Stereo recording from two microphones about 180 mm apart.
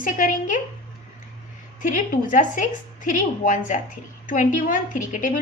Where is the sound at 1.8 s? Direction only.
45° left (ahead or behind).